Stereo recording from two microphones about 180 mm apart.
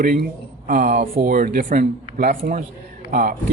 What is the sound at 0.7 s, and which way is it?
Speech, 45° right (ahead or behind).